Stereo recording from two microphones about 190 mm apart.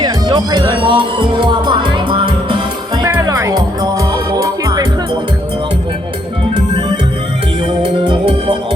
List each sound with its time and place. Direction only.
0.0 s music: 25° right (ahead or behind)
7.8 s music: 25° right (ahead or behind)